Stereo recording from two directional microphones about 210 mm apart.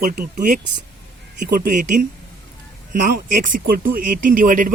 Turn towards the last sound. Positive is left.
turn(degrees=-40)  # may be behind; listen again after turning